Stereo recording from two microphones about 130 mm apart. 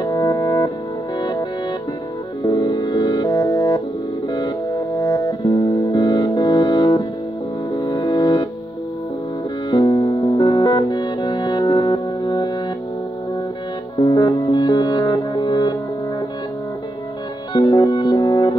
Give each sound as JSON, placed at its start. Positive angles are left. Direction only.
{"t": 0.0, "sound": "music", "side_deg": 30}
{"t": 2.4, "sound": "music", "side_deg": 35}
{"t": 4.9, "sound": "music", "side_deg": 35}
{"t": 9.7, "sound": "music", "side_deg": 35}
{"t": 13.9, "sound": "music", "side_deg": 35}
{"t": 17.5, "sound": "music", "side_deg": 35}